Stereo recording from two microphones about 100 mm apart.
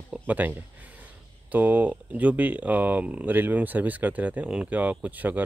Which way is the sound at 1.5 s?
15° right (ahead or behind).